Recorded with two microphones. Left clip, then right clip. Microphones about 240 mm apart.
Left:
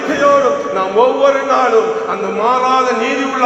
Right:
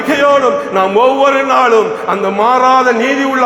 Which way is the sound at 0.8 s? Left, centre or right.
Right.